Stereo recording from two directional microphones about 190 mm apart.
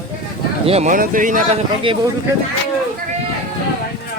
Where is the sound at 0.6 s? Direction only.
35° right (ahead or behind).